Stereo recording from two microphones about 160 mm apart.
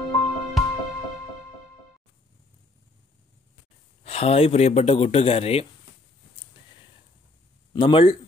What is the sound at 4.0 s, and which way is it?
Speech, 40° left (ahead or behind).